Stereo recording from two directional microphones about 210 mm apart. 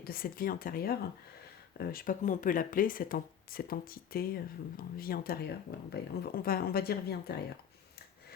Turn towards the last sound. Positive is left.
turn(degrees=50)  # may be behind; listen again after turning